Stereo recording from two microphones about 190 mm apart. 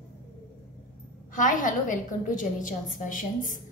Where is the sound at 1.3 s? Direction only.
45° left (ahead or behind).